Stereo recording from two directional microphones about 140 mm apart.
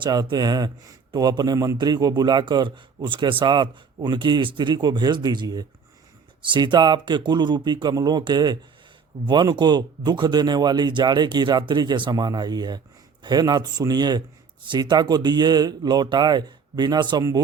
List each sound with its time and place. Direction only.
0.0 s speech: 30° right (ahead or behind)